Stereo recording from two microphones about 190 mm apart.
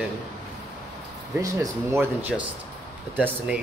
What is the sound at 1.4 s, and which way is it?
Speech, 15° right (ahead or behind).